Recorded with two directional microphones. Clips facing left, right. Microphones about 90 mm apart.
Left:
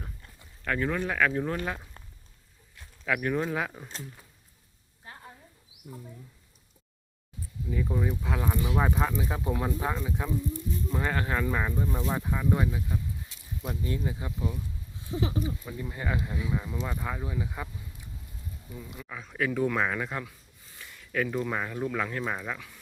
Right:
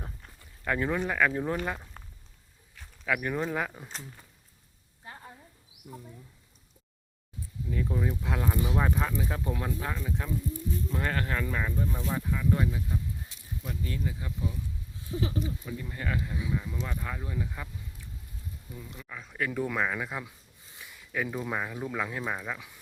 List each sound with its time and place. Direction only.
0.6 s speech: 10° right (ahead or behind)
3.0 s speech: centre (ahead or behind)
7.7 s speech: 5° left (ahead or behind)
13.7 s speech: 25° left (ahead or behind)
18.7 s speech: 5° left (ahead or behind)